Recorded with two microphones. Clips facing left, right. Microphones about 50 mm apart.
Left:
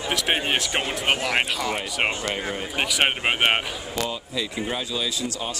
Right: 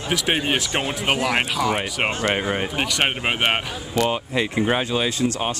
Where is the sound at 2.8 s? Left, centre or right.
Centre.